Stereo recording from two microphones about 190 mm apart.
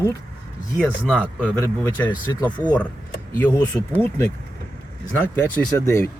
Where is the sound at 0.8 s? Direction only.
5° right (ahead or behind).